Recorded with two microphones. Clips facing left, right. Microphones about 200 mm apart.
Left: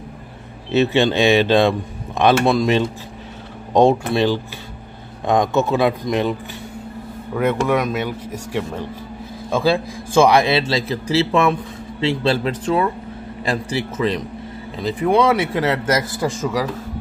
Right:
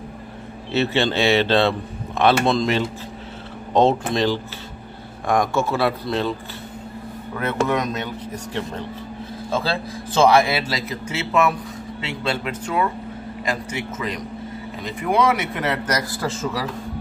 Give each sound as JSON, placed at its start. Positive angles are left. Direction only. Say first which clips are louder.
{"t": 0.7, "sound": "speech", "louder": "left 4 dB", "side_deg": 15}
{"t": 7.3, "sound": "a man's voice", "louder": "left 4 dB", "side_deg": 10}